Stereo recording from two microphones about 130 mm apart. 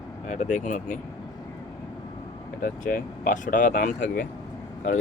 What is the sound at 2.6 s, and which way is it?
Speech, 90° left.